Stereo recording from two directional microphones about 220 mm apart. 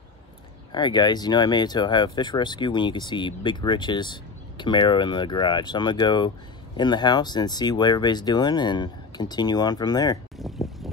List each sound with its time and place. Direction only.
0.7 s speech: 20° left (ahead or behind)
10.3 s boat: centre (ahead or behind)